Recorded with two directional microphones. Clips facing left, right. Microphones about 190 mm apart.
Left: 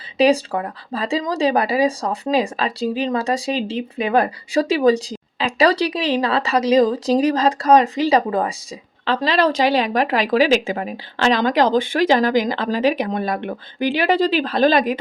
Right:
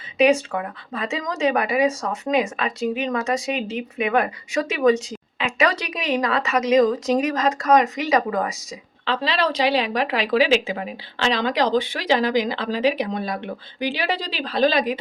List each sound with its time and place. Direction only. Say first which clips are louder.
0.2 s speech: left 2 dB; 35° left (ahead or behind)
9.0 s speech: left 5 dB; 45° left (ahead or behind)